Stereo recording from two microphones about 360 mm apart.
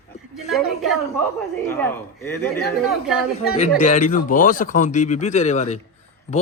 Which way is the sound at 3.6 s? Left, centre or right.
Centre.